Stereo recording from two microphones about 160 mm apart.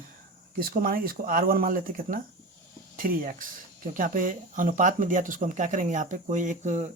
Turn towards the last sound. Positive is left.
turn(degrees=-45)  # may be behind; listen again after turning